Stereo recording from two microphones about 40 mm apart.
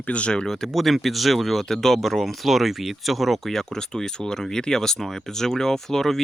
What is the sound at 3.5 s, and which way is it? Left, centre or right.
Speech, centre.